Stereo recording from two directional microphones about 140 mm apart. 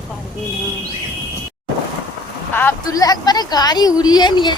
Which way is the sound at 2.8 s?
25° left (ahead or behind).